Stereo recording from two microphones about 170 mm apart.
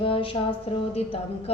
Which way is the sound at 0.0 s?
30° left (ahead or behind).